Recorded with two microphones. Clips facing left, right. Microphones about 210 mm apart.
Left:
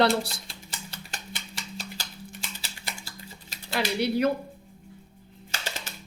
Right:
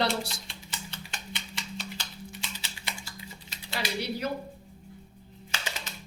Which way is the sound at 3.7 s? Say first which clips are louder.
Left 7 dB; 60° left (ahead or behind).